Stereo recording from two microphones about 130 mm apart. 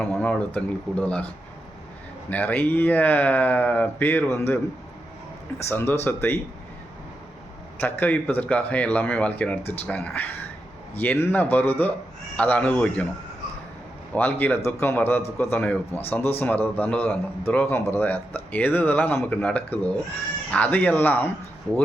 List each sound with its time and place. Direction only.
0.0 s a man's voice: 15° left (ahead or behind)
2.3 s a man's voice: 15° left (ahead or behind)
5.6 s a man's voice: 15° left (ahead or behind)
7.8 s a man's voice: 15° left (ahead or behind)
14.2 s a man's voice: 15° left (ahead or behind)